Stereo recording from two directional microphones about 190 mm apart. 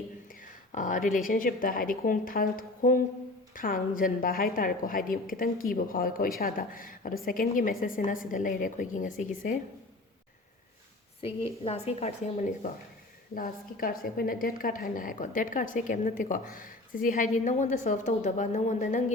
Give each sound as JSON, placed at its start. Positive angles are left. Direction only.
{"t": 0.7, "sound": "a woman's voice", "side_deg": 45}
{"t": 11.2, "sound": "a woman's voice", "side_deg": 30}
{"t": 13.3, "sound": "a woman's voice", "side_deg": 50}